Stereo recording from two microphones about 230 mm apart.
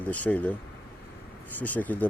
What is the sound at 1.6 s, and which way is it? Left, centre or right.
Speech, centre.